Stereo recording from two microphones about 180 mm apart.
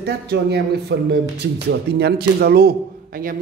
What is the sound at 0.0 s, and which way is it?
A man's voice, 65° right (ahead or behind).